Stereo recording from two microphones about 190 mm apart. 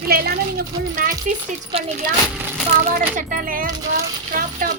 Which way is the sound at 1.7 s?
30° right (ahead or behind).